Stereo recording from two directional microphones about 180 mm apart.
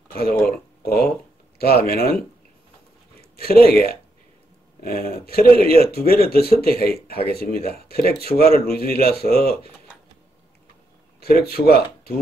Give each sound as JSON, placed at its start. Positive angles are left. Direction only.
{"t": 0.1, "sound": "speech", "side_deg": 55}
{"t": 3.3, "sound": "speech", "side_deg": 60}
{"t": 4.8, "sound": "speech", "side_deg": 55}
{"t": 11.4, "sound": "speech", "side_deg": 60}